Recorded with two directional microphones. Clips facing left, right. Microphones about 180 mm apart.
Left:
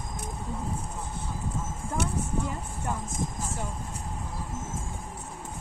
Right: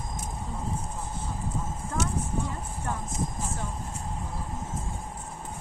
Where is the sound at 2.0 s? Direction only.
60° left (ahead or behind).